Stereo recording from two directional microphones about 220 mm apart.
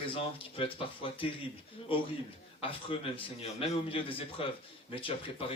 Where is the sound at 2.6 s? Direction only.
25° left (ahead or behind).